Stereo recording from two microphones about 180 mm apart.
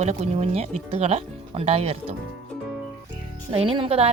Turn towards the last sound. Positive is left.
turn(degrees=-35)  # may be behind; listen again after turning